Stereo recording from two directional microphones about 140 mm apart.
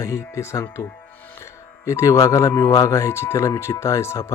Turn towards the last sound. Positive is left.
turn(degrees=20)  # may be behind; listen again after turning